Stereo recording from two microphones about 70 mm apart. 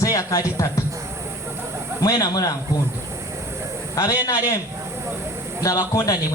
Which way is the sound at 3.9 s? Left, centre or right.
Left.